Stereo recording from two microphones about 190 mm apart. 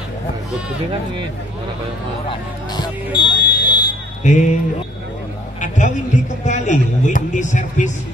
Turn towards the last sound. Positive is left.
turn(degrees=40)  # may be behind; listen again after turning